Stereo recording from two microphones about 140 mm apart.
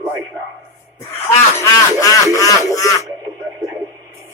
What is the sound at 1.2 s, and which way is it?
Speech, 25° left (ahead or behind).